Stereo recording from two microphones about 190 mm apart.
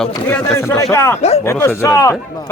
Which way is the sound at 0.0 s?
10° left (ahead or behind).